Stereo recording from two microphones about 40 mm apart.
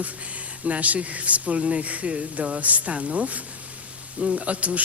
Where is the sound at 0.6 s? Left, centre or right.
Right.